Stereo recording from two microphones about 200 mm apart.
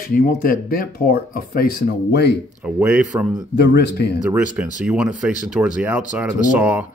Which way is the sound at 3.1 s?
15° right (ahead or behind).